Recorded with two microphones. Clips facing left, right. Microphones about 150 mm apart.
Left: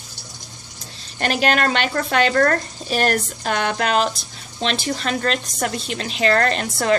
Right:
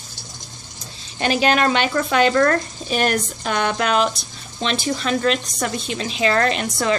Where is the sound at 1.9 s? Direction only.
50° left (ahead or behind).